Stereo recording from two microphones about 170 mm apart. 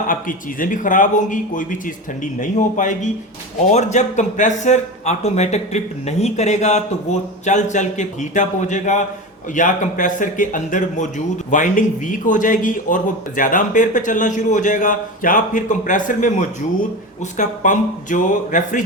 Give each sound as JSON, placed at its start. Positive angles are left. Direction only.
{"t": 0.1, "sound": "speech", "side_deg": 50}